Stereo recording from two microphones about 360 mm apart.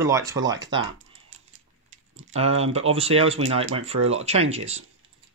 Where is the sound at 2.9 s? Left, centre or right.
Centre.